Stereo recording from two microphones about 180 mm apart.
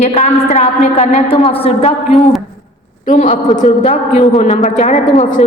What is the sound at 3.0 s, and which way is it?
A woman's voice, 45° left (ahead or behind).